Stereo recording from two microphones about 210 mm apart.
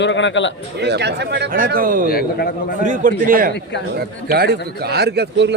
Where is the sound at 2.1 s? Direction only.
45° left (ahead or behind).